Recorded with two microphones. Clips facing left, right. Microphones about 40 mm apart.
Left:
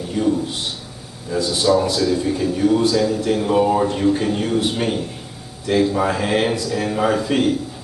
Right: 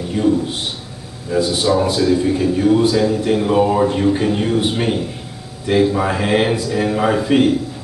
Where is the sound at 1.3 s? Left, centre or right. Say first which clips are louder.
Right 1 dB; right.